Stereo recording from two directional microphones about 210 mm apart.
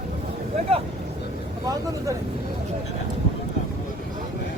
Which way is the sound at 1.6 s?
15° right (ahead or behind).